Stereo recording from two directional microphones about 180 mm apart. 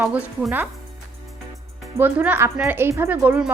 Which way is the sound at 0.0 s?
10° right (ahead or behind).